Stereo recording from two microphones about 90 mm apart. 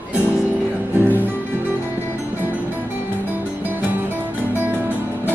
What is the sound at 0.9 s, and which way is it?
Music, 20° right (ahead or behind).